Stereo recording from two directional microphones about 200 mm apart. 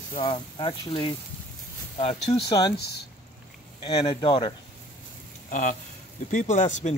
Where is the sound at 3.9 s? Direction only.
20° left (ahead or behind).